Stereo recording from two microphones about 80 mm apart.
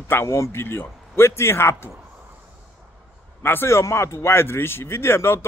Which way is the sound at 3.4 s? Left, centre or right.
Left.